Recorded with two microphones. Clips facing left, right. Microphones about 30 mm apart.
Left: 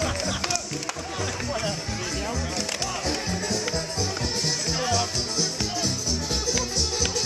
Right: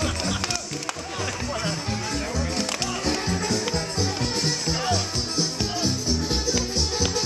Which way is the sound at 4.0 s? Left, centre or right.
Right.